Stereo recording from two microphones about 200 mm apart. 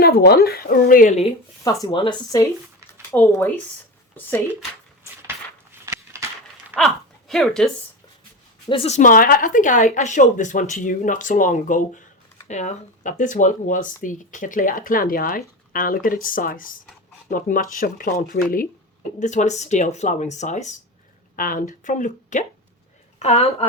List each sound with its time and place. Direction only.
0.0 s speech: 50° left (ahead or behind)
1.6 s speech: 15° left (ahead or behind)
5.8 s a sound: 15° right (ahead or behind)
6.7 s a woman's voice: centre (ahead or behind)
8.7 s speech: 30° left (ahead or behind)